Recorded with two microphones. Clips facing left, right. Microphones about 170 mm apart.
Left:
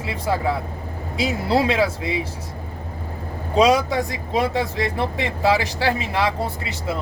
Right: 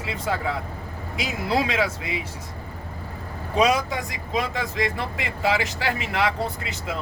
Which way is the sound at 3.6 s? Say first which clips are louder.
Left 5 dB; 30° left (ahead or behind).